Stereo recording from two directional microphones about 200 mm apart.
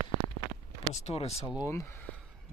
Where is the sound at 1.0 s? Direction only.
30° left (ahead or behind).